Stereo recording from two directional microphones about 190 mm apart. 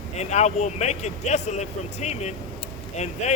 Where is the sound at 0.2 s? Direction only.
35° left (ahead or behind).